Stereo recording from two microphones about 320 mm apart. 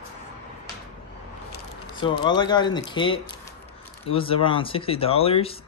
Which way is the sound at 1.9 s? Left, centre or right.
Centre.